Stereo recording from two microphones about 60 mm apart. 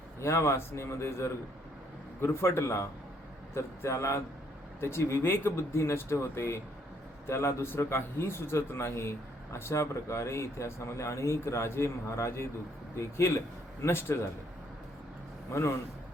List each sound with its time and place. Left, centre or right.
0.2 s a man's voice: left
15.5 s a man's voice: left